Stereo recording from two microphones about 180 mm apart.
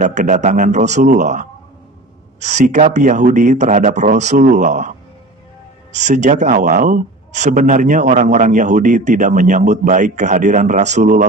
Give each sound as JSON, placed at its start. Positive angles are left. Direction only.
{"t": 0.0, "sound": "a man's voice", "side_deg": -40}